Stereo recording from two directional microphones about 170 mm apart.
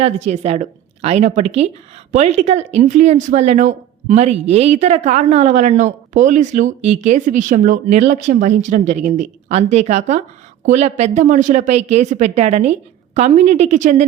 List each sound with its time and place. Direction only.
0.0 s speech: 40° right (ahead or behind)